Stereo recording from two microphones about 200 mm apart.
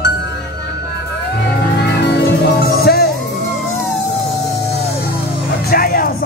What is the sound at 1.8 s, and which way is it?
Music, 55° left (ahead or behind).